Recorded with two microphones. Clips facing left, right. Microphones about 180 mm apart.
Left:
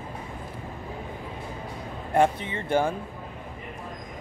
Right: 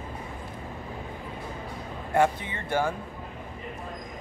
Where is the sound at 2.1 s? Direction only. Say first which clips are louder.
Left 2 dB; 25° left (ahead or behind).